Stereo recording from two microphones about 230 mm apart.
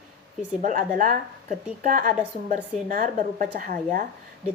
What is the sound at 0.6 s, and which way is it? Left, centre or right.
Speech, right.